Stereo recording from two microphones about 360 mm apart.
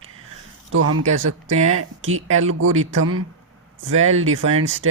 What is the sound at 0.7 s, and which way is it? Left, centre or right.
Speech, right.